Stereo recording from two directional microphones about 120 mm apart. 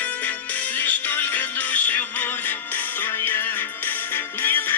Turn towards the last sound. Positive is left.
turn(degrees=15)  # may be behind; listen again after turning